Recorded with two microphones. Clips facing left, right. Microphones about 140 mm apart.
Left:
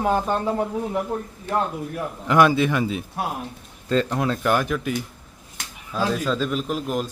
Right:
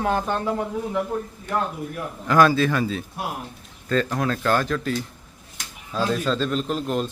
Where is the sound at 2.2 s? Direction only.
20° left (ahead or behind).